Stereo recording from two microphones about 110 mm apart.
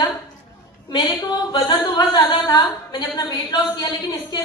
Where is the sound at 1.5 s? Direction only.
40° left (ahead or behind).